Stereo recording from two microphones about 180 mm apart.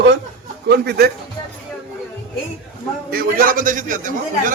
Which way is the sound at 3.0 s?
55° right (ahead or behind).